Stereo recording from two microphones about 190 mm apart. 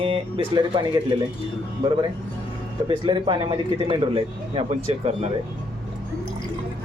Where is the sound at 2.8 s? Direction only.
25° right (ahead or behind).